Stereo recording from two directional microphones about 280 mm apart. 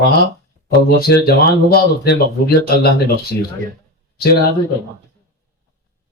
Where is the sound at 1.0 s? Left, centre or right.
Left.